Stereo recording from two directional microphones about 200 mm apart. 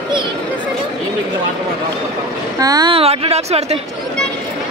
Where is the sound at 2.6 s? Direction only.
20° right (ahead or behind).